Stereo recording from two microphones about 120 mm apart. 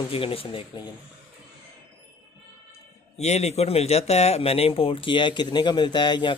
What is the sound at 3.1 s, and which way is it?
Speech, 65° left (ahead or behind).